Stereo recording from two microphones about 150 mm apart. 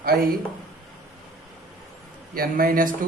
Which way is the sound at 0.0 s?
80° right.